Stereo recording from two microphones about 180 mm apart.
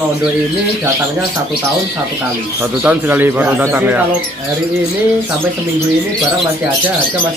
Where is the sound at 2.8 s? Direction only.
10° right (ahead or behind).